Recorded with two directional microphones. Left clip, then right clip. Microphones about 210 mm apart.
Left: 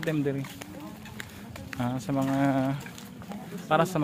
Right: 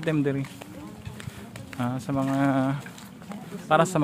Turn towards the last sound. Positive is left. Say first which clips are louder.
# right 3 dB
turn(degrees=-15)  # may be behind; listen again after turning